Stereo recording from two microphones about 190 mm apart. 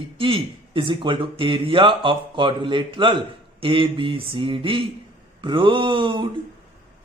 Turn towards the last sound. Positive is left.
turn(degrees=-25)  # may be behind; listen again after turning